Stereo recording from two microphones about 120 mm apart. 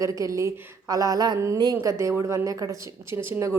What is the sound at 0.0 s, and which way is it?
A woman's voice, 30° right (ahead or behind).